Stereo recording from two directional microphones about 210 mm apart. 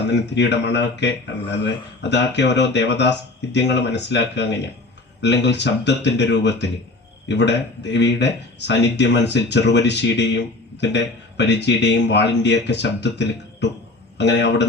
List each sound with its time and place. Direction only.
0.1 s speech: 55° left (ahead or behind)